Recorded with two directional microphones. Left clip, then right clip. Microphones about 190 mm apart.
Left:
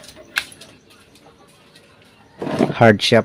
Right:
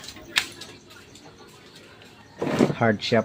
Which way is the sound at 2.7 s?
50° left (ahead or behind).